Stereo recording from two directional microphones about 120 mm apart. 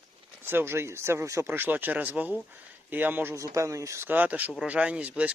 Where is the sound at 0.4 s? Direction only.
20° right (ahead or behind).